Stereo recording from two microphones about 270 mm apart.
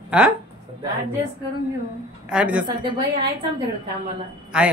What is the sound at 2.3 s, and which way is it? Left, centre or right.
Speech, centre.